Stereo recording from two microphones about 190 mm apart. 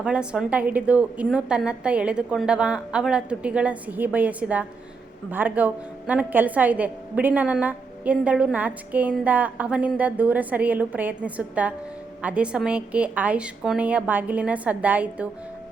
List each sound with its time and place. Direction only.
0.0 s a woman's voice: 5° right (ahead or behind)